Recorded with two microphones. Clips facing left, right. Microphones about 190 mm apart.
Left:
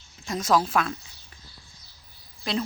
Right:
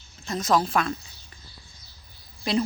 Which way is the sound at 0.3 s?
10° left (ahead or behind).